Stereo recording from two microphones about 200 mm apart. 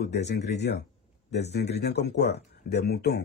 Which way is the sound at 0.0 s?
55° left (ahead or behind).